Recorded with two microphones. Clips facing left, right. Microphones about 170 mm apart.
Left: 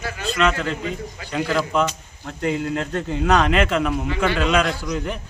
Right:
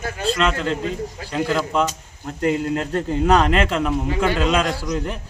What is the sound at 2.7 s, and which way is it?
Speech, 35° right (ahead or behind).